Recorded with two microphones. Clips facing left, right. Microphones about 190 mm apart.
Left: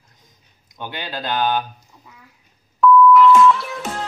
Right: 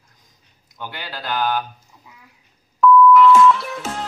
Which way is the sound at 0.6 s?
20° left (ahead or behind).